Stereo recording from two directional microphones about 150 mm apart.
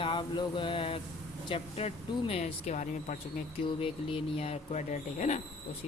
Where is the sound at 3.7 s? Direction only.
35° left (ahead or behind); by 5.4 s 55° left (ahead or behind).